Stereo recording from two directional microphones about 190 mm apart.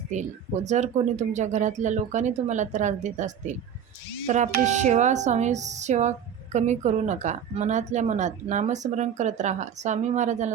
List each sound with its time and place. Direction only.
0.1 s a woman's voice: 40° right (ahead or behind)